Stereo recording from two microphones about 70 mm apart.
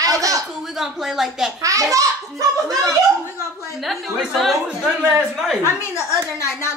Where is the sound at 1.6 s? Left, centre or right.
Right.